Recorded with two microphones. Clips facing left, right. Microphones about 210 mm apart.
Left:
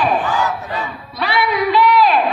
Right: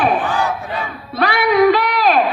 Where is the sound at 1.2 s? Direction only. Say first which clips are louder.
Right 5 dB; 50° right (ahead or behind).